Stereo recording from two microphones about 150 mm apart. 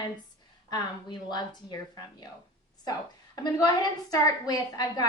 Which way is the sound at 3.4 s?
25° left (ahead or behind).